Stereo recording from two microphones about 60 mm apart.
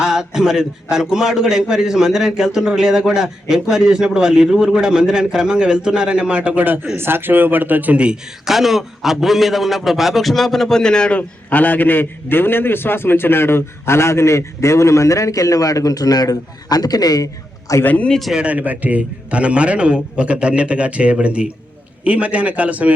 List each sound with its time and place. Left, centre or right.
0.0 s a man's voice: centre
6.9 s speech: right; by 8.2 s centre
8.4 s a man's voice: centre
11.2 s a man's voice: left
17.8 s speech: left
18.1 s a man's voice: centre
18.3 s a man's voice: right